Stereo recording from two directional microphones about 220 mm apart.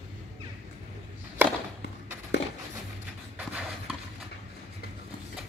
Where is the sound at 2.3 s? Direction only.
50° left (ahead or behind).